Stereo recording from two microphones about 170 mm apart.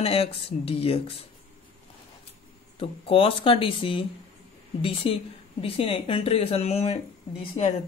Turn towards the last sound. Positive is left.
turn(degrees=40)  # may be behind; listen again after turning